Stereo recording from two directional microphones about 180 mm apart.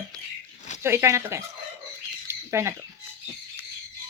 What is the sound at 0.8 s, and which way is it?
Speech, 15° right (ahead or behind).